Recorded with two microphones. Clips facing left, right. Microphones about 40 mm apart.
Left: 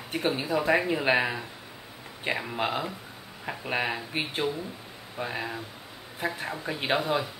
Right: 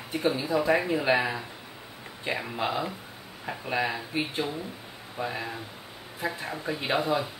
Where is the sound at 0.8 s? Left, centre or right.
Centre.